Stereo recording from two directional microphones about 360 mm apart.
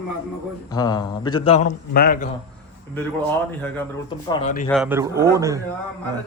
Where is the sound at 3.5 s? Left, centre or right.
Centre.